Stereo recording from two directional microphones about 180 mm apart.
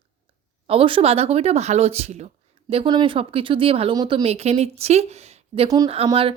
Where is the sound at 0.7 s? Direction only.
30° right (ahead or behind).